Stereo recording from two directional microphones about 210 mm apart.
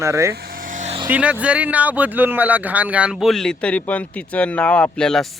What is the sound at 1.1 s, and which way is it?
Speech, 5° right (ahead or behind).